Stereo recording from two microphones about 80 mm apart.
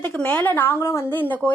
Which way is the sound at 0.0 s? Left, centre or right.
Centre.